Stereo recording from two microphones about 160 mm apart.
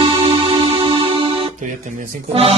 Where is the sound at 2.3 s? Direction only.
40° right (ahead or behind).